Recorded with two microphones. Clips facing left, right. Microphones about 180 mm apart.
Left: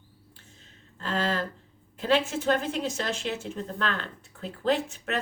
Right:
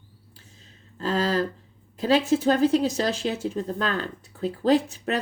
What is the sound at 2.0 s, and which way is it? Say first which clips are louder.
Speech: right 5 dB; 40° right (ahead or behind).